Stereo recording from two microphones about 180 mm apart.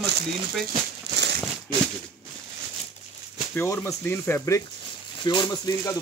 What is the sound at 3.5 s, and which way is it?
Speech, 15° left (ahead or behind).